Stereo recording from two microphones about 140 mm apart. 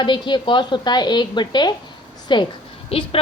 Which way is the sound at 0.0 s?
35° left (ahead or behind).